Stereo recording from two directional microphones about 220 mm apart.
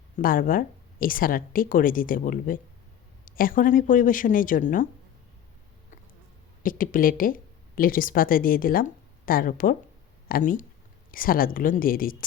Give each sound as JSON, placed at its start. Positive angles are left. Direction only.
{"t": 0.2, "sound": "speech", "side_deg": 40}
{"t": 6.6, "sound": "speech", "side_deg": 40}